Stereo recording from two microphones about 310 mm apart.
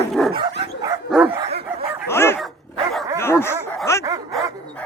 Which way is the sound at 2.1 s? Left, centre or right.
Centre.